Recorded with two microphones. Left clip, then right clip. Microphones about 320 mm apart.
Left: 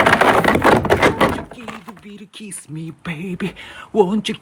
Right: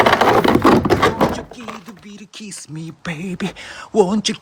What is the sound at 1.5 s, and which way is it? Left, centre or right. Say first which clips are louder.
Speech: right 1 dB; centre.